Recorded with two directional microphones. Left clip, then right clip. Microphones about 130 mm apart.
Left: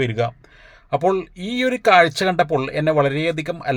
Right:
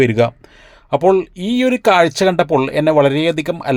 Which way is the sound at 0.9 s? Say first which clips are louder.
Right 6 dB; 35° right (ahead or behind).